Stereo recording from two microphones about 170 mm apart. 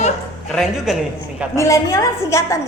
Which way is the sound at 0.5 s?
Centre (ahead or behind).